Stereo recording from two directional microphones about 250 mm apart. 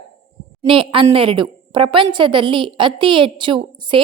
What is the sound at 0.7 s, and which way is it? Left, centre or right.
A woman's voice, right.